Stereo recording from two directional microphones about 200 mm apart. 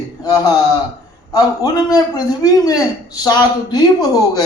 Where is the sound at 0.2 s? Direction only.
20° left (ahead or behind).